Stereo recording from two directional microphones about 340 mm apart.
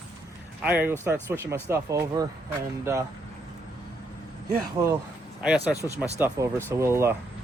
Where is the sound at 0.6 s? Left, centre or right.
Centre.